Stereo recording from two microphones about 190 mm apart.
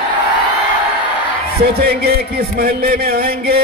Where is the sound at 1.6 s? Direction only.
55° right (ahead or behind).